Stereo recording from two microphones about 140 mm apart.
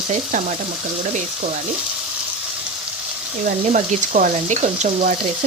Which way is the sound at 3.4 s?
60° right (ahead or behind).